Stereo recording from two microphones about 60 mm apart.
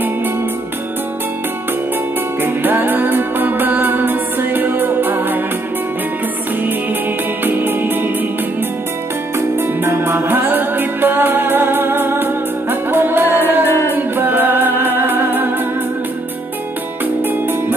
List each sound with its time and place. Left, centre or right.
2.4 s music: right
7.4 s music: right
9.6 s music: right
17.2 s music: right